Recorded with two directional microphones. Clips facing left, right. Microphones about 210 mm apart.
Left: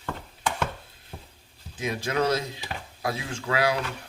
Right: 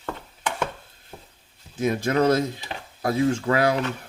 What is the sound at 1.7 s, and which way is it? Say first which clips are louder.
Speech: right 5 dB; 45° right (ahead or behind).